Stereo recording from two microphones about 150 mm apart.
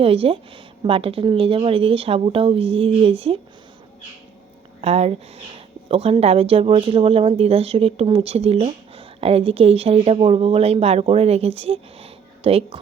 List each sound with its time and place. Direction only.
0.0 s speech: 40° right (ahead or behind)
4.8 s speech: 45° right (ahead or behind)